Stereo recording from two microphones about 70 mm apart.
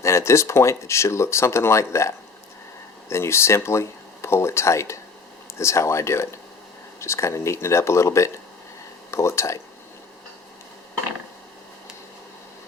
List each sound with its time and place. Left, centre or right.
0.0 s speech: left